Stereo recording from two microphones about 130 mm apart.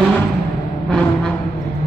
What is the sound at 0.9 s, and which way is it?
Music, 5° left (ahead or behind).